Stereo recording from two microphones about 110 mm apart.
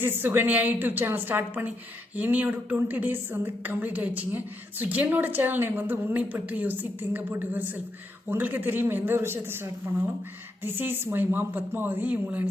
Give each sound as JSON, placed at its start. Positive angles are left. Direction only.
{"t": 0.0, "sound": "a woman's voice", "side_deg": -20}